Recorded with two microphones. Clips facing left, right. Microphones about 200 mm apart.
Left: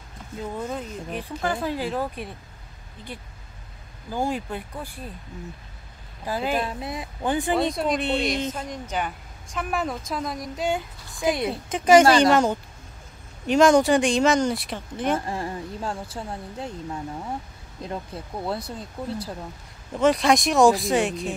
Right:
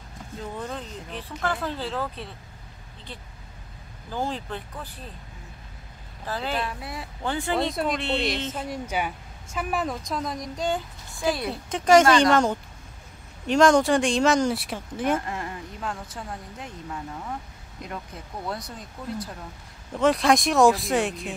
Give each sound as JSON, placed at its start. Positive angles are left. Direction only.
{"t": 0.6, "sound": "speech", "side_deg": 10}
{"t": 4.1, "sound": "speech", "side_deg": 10}
{"t": 6.2, "sound": "speech", "side_deg": 10}
{"t": 7.7, "sound": "speech", "side_deg": 0}
{"t": 11.7, "sound": "speech", "side_deg": 5}
{"t": 15.1, "sound": "speech", "side_deg": 30}
{"t": 20.0, "sound": "speech", "side_deg": 0}